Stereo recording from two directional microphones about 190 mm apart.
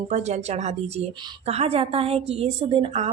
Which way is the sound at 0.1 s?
35° right (ahead or behind).